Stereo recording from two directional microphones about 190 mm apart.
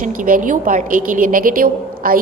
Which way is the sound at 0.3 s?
45° right (ahead or behind).